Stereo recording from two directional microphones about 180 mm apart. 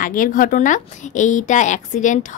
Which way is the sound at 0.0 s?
50° left (ahead or behind).